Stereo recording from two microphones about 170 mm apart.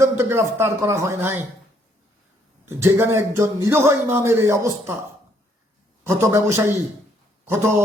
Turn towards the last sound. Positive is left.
turn(degrees=-15)  # may be behind; listen again after turning